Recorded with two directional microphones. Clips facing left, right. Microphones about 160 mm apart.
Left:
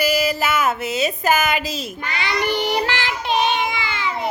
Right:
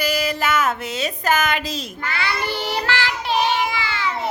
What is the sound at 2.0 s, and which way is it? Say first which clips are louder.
Child singing: left 2 dB; 20° left (ahead or behind).